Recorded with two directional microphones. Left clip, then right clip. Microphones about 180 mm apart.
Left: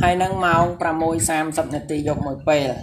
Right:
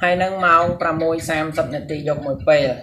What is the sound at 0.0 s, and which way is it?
Speech, 35° left (ahead or behind).